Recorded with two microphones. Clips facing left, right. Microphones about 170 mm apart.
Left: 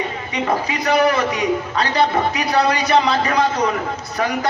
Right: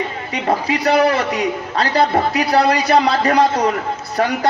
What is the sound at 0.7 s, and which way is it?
A man's voice, 35° right (ahead or behind).